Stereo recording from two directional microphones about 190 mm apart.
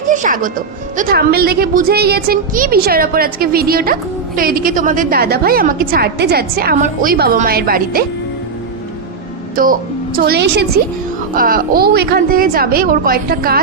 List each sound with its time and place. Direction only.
0.1 s music: 45° right (ahead or behind)
0.9 s a woman's voice: 50° right (ahead or behind)
10.2 s a woman's voice: 60° right (ahead or behind)
11.3 s a woman's voice: 50° right (ahead or behind)